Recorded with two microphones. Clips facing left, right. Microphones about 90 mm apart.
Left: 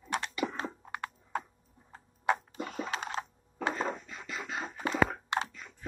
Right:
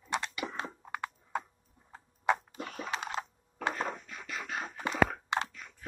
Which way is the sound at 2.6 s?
20° left (ahead or behind).